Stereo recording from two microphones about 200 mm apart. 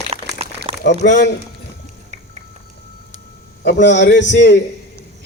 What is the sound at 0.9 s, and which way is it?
Speech, 60° left (ahead or behind).